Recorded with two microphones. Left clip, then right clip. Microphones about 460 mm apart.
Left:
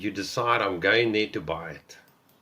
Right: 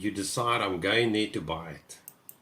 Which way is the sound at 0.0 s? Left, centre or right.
Centre.